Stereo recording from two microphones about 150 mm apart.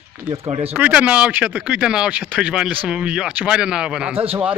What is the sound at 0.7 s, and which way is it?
Speech, 10° right (ahead or behind).